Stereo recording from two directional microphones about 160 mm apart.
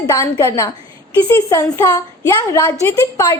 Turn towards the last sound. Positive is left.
turn(degrees=20)  # may be behind; listen again after turning